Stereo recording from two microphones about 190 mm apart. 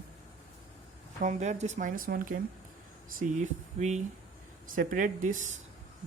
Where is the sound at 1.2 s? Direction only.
40° right (ahead or behind).